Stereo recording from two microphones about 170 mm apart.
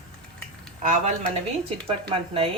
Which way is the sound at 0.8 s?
50° right (ahead or behind).